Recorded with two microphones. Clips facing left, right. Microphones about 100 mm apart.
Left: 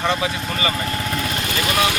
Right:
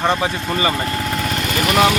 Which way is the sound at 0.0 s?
35° right (ahead or behind).